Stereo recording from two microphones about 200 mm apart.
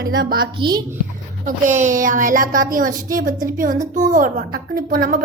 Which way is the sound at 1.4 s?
40° right (ahead or behind).